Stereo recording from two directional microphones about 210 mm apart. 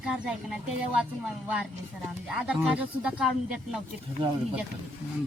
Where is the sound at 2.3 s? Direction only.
5° right (ahead or behind).